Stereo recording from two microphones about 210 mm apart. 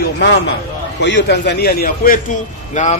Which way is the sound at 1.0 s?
55° left (ahead or behind).